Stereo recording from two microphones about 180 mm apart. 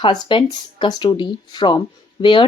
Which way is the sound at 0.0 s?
25° left (ahead or behind).